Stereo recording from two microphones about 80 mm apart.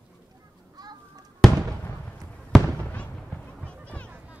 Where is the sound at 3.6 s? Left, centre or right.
Centre.